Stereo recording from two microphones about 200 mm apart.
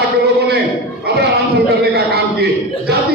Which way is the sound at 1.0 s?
55° right (ahead or behind).